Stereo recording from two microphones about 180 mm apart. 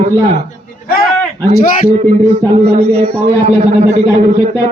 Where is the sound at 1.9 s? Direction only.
40° right (ahead or behind).